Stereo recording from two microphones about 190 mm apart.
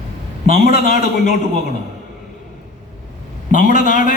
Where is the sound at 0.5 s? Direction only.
45° left (ahead or behind).